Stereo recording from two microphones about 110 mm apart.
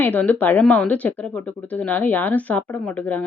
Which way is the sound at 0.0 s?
15° left (ahead or behind).